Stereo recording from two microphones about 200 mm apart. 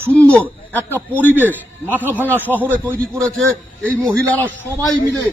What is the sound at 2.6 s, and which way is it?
A man's voice, 5° left (ahead or behind).